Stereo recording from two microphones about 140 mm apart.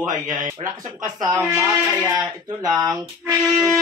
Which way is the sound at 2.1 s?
30° right (ahead or behind).